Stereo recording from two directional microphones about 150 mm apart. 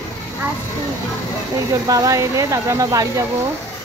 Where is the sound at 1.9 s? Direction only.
20° right (ahead or behind).